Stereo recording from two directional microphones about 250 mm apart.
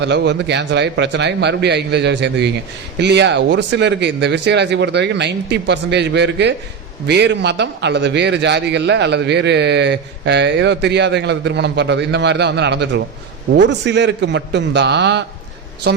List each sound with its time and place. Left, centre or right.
0.0 s a man's voice: right